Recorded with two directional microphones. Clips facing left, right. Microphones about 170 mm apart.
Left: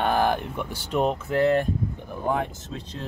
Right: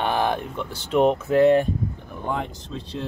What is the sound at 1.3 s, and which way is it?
Speech, 25° right (ahead or behind).